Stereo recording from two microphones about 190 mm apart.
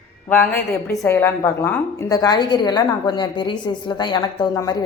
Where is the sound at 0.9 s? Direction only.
15° left (ahead or behind).